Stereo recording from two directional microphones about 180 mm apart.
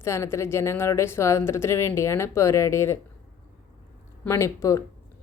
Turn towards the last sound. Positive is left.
turn(degrees=15)  # may be behind; listen again after turning